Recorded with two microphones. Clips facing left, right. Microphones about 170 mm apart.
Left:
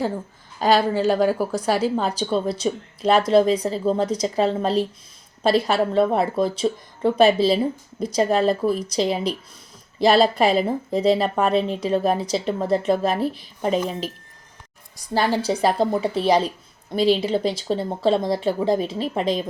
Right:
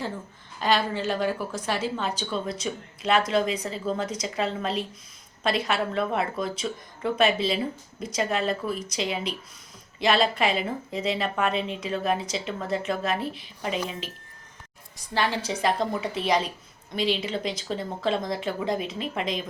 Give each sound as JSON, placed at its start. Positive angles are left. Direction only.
{"t": 0.6, "sound": "a woman's voice", "side_deg": 40}
{"t": 15.1, "sound": "a woman's voice", "side_deg": 35}